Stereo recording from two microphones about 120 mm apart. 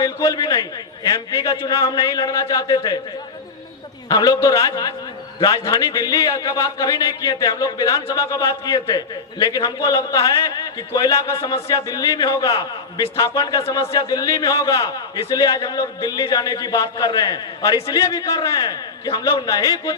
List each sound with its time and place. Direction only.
0.0 s a man's voice: 30° left (ahead or behind)
4.1 s a man's voice: 30° left (ahead or behind)